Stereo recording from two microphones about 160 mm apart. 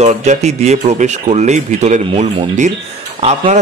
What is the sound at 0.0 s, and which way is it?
Speech, 45° right (ahead or behind).